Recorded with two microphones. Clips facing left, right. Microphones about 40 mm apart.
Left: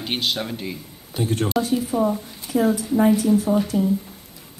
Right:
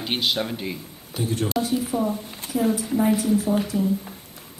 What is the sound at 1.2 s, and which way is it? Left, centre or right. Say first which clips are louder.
Speech: left 2 dB; left.